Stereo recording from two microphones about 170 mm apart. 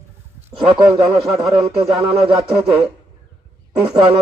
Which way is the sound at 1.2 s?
Centre (ahead or behind).